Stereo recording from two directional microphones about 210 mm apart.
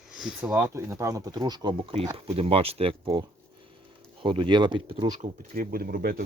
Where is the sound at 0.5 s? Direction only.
15° right (ahead or behind).